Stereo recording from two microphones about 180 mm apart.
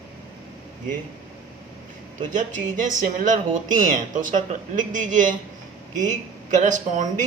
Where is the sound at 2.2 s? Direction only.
45° right (ahead or behind).